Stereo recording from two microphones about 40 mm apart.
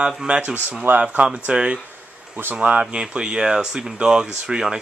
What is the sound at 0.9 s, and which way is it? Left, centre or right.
Speech, right.